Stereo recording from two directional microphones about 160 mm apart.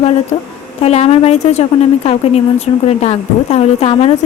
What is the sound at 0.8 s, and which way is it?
A woman's voice, 40° left (ahead or behind).